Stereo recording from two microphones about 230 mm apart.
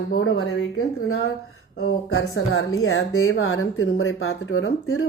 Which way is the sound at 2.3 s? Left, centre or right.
Left.